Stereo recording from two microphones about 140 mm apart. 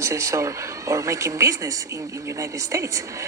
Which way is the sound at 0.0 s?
20° right (ahead or behind).